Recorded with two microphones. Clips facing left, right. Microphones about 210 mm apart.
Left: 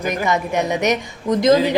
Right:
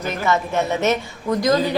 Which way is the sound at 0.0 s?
15° left (ahead or behind).